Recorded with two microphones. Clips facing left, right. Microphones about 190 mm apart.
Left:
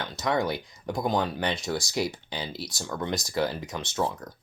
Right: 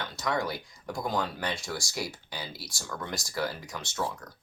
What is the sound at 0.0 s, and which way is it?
Speech, 20° left (ahead or behind).